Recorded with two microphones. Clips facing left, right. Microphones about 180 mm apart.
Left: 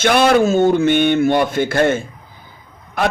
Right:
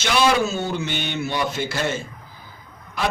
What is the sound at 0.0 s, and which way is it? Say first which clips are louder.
Speech: left 7 dB; 55° left (ahead or behind).